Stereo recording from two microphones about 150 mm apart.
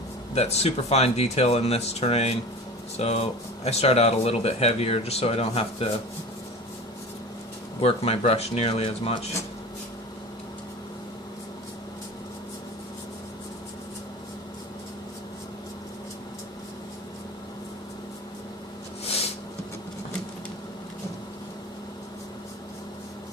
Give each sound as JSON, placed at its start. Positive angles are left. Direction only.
{"t": 0.3, "sound": "speech", "side_deg": 45}
{"t": 7.8, "sound": "speech", "side_deg": 45}